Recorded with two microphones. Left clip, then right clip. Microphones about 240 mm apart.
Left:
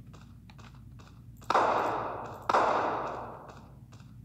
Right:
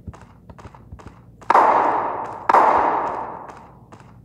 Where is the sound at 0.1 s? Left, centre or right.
Right.